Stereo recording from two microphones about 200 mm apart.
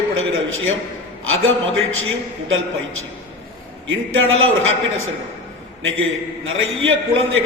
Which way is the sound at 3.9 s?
80° right.